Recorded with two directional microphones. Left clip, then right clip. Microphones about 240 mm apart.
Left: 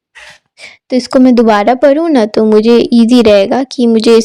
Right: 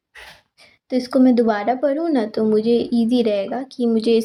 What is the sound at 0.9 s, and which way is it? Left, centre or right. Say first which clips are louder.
Speech: left 8 dB; left.